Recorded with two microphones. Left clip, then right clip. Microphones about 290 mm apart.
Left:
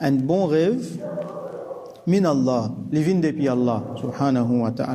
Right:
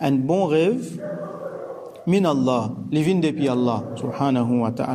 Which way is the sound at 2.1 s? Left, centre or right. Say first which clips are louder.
Even; centre.